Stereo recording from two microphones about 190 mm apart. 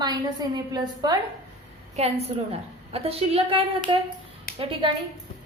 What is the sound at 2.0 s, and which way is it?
A woman's voice, 35° right (ahead or behind).